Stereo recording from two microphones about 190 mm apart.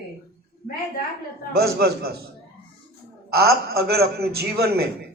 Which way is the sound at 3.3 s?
55° right (ahead or behind).